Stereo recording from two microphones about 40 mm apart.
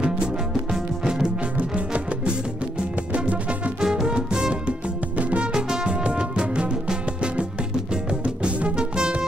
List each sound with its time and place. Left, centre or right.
1.0 s music: centre
3.8 s music: centre
4.6 s music: right
5.5 s music: centre